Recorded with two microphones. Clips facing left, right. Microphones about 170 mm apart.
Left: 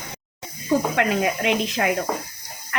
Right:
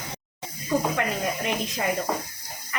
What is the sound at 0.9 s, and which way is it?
Speech, 80° left.